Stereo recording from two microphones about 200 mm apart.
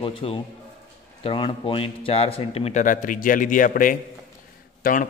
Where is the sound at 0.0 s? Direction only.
30° left (ahead or behind).